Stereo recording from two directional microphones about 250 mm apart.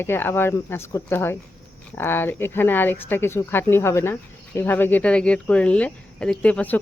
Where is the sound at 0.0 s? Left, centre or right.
Centre.